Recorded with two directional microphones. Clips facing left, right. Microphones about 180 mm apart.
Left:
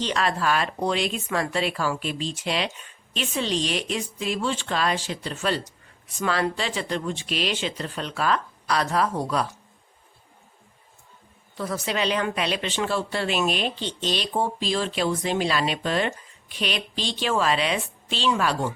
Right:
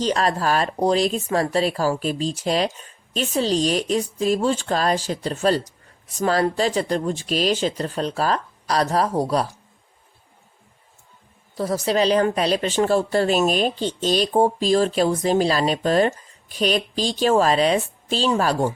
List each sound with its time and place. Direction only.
0.0 s speech: 40° right (ahead or behind)
11.5 s speech: 40° right (ahead or behind)